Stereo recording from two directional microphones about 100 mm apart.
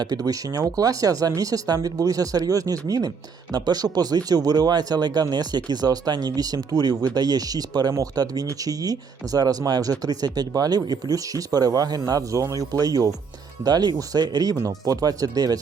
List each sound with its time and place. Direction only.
0.0 s speech: 40° right (ahead or behind)